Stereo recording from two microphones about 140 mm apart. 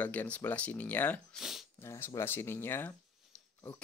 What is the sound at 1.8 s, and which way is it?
Speech, 20° left (ahead or behind).